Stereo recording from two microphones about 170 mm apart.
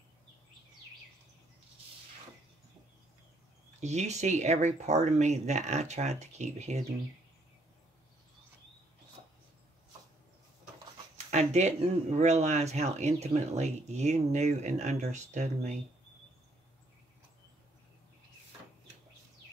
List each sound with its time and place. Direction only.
3.8 s speech: 40° right (ahead or behind)
11.2 s speech: 40° right (ahead or behind)